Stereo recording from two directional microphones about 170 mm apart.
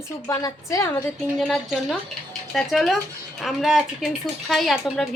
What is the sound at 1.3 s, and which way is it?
A woman's voice, centre (ahead or behind).